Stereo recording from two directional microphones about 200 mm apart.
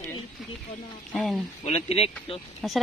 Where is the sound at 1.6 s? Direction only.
30° left (ahead or behind).